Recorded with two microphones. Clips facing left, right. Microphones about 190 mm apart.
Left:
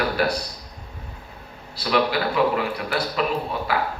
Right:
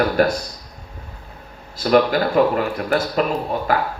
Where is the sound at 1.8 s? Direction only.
45° right (ahead or behind).